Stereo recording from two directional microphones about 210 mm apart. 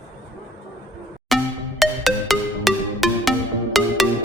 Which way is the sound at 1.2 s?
Centre (ahead or behind).